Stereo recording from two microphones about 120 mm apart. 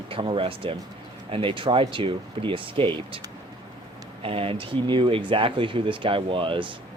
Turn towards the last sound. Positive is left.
turn(degrees=-45)  # may be behind; listen again after turning